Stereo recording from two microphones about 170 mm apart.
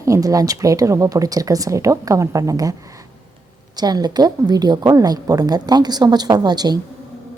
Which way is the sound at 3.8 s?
25° right (ahead or behind).